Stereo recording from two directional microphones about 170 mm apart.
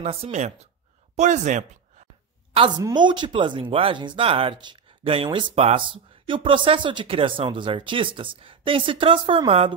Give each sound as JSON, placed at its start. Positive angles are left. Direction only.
{"t": 0.0, "sound": "speech", "side_deg": -40}
{"t": 2.5, "sound": "a woman's voice", "side_deg": -30}